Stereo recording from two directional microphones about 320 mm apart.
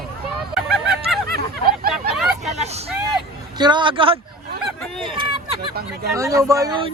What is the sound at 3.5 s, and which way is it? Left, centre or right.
Speech, centre.